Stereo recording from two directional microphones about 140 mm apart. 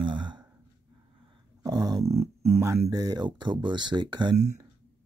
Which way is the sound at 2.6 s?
25° right (ahead or behind).